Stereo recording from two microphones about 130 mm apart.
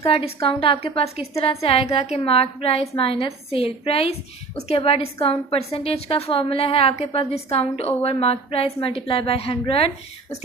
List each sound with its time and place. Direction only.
0.1 s a woman's voice: 50° left (ahead or behind)